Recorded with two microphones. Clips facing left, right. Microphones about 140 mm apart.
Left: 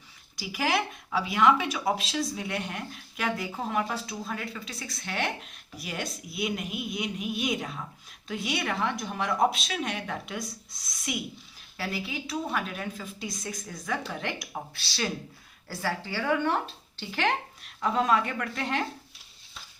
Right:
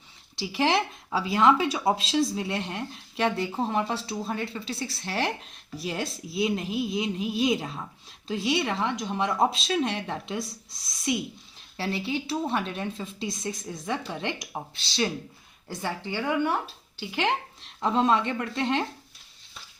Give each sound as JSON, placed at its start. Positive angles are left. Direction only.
{"t": 0.3, "sound": "speech", "side_deg": -25}